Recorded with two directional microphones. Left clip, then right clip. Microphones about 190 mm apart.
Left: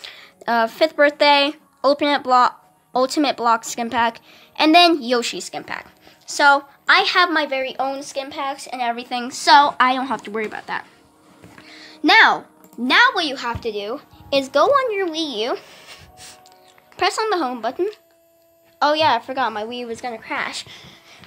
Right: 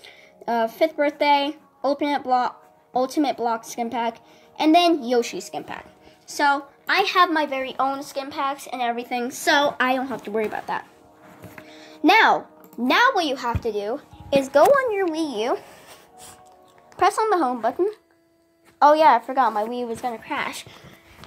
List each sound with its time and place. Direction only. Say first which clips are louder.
0.0 s a woman's voice: left 4 dB; 25° left (ahead or behind); by 20.5 s 5° right (ahead or behind)